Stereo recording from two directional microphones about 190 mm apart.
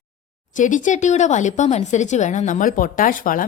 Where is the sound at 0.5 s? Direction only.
40° left (ahead or behind).